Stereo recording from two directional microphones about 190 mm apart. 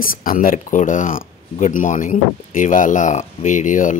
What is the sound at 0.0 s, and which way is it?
Speech, 45° left (ahead or behind).